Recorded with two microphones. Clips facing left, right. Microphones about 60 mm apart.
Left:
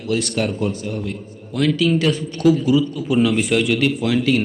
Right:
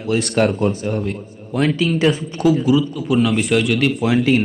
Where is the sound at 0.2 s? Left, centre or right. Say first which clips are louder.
Right 4 dB; right.